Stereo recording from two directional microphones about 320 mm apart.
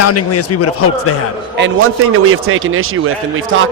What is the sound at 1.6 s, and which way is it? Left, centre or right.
A man's voice, right.